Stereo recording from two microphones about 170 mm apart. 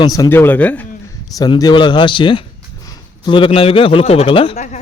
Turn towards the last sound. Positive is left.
turn(degrees=40)  # may be behind; listen again after turning